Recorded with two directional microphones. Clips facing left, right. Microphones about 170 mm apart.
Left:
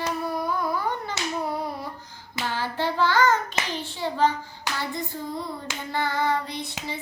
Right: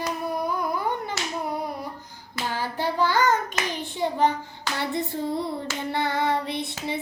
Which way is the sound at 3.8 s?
20° right (ahead or behind).